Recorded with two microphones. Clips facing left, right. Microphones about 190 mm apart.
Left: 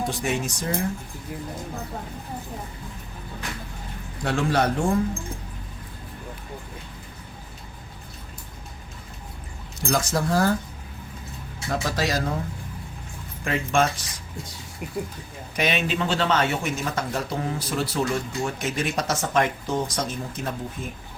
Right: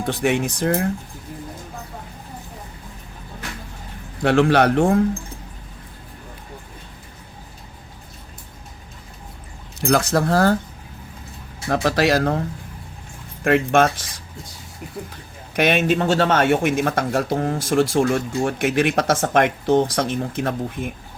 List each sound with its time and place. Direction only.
0.1 s speech: 60° right (ahead or behind)
4.2 s speech: 65° right (ahead or behind)
9.8 s speech: 65° right (ahead or behind)
11.7 s speech: 70° right (ahead or behind)
13.4 s speech: 65° right (ahead or behind)
15.5 s speech: 50° right (ahead or behind)